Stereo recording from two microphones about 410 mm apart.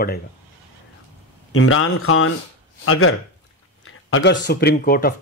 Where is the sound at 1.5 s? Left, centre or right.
Left.